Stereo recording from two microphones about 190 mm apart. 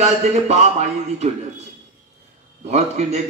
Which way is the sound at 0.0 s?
35° right (ahead or behind).